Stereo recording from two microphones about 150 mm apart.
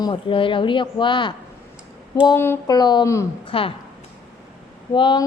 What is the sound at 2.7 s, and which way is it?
Speech, 30° left (ahead or behind).